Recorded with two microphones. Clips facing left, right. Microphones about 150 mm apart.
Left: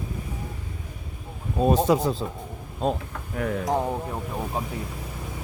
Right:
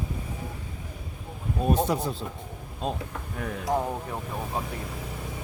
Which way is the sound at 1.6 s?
90° left.